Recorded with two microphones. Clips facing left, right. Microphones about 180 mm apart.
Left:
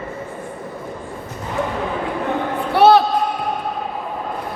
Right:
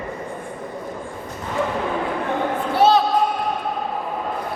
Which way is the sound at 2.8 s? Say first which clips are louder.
Left 4 dB; 65° left (ahead or behind).